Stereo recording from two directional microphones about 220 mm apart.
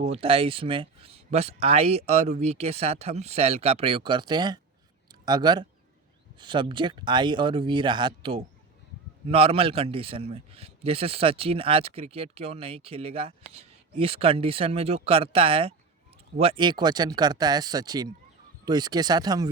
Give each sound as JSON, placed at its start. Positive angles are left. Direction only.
{"t": 0.0, "sound": "a man's voice", "side_deg": -25}